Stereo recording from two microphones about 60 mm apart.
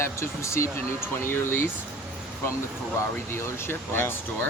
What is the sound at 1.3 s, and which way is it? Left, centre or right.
Speech, left.